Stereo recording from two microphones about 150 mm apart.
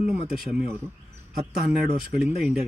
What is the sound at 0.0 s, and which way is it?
Speech, 5° right (ahead or behind).